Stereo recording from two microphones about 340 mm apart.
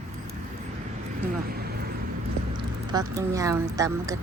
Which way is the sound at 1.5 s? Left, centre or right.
Right.